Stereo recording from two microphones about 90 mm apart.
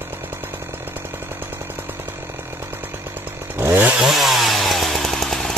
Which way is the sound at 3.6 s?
20° right (ahead or behind).